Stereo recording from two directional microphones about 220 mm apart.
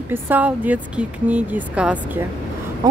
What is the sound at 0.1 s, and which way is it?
Speech, 10° right (ahead or behind).